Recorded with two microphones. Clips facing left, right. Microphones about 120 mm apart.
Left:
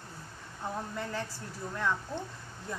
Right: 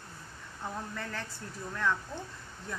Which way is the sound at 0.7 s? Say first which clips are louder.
Left 4 dB; 15° left (ahead or behind).